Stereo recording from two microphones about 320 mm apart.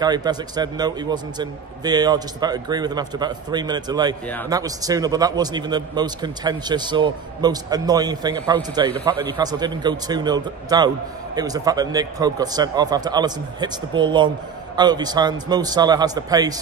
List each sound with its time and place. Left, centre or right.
0.0 s a man's voice: centre